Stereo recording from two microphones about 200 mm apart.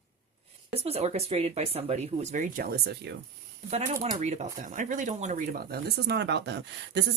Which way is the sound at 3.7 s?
35° right (ahead or behind).